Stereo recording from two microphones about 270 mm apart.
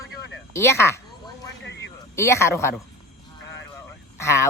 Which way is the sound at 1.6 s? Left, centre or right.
Left.